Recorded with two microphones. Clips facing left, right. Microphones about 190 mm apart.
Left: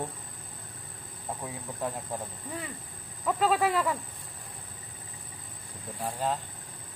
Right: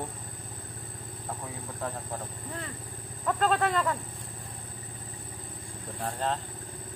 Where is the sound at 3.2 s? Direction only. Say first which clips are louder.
Left 1 dB; 5° left (ahead or behind).